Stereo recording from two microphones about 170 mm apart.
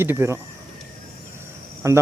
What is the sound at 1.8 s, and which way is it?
Speech, 15° right (ahead or behind).